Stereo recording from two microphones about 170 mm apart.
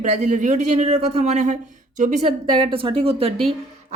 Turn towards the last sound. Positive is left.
turn(degrees=-35)  # may be behind; listen again after turning